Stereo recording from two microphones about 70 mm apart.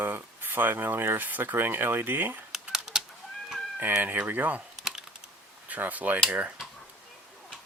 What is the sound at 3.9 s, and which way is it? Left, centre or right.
Speech, right.